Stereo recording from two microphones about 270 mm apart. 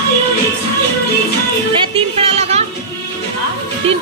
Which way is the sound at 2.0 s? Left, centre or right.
Right.